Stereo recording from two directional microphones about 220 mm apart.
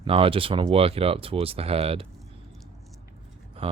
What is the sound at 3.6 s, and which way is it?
Speech, 25° right (ahead or behind).